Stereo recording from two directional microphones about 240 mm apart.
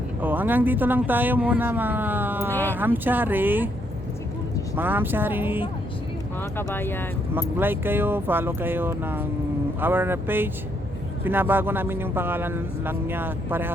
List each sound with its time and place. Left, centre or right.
0.2 s a man's voice: centre
2.5 s speech: centre
2.7 s a man's voice: centre
4.8 s a man's voice: centre
6.6 s speech: centre
7.3 s a man's voice: centre